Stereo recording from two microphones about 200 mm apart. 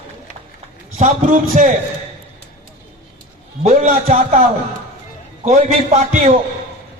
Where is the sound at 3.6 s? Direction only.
30° right (ahead or behind).